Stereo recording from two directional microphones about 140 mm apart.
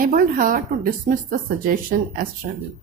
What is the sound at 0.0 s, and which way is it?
Speech, 90° right.